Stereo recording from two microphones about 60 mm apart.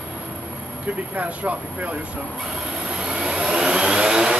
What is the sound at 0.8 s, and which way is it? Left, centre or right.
Speech, right.